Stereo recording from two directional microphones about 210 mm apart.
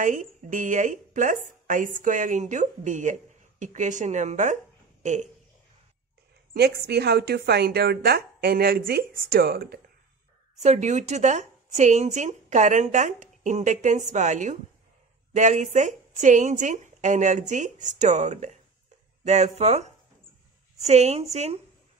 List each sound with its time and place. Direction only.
0.0 s speech: 40° right (ahead or behind)
6.5 s a woman's voice: 50° right (ahead or behind)
10.6 s speech: 35° right (ahead or behind)